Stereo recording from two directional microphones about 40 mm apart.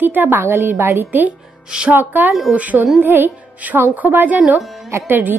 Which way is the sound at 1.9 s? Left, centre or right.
Right.